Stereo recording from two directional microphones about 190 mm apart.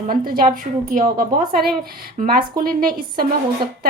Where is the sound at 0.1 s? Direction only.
50° right (ahead or behind).